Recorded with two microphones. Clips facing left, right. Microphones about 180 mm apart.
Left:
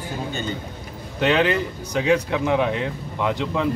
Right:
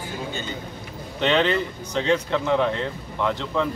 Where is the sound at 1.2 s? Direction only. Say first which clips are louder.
Left 1 dB; 10° left (ahead or behind).